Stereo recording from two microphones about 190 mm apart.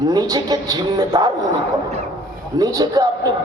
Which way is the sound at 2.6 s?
20° right (ahead or behind).